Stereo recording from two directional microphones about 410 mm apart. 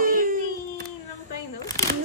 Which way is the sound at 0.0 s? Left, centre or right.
Centre.